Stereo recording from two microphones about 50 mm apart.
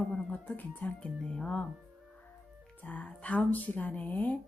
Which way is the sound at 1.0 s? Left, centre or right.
Left.